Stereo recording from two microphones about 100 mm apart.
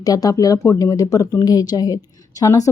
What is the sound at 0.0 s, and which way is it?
Speech, 40° left (ahead or behind).